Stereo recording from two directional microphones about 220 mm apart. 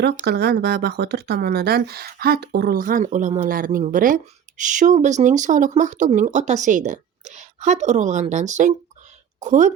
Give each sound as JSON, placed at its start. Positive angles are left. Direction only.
{"t": 0.2, "sound": "speech", "side_deg": -45}